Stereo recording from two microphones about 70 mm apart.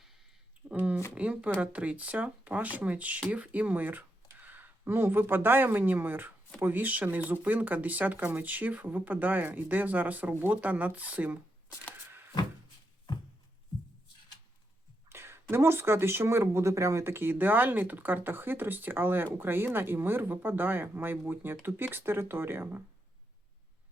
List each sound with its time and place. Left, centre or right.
0.7 s speech: centre
11.9 s a sound: right
15.1 s speech: right